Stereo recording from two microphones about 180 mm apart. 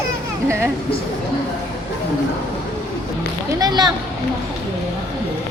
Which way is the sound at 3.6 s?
25° right (ahead or behind).